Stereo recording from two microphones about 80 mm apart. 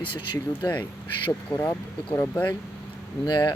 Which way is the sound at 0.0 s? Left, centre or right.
Left.